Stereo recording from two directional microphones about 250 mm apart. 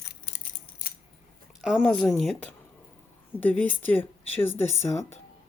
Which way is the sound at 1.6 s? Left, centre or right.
Centre.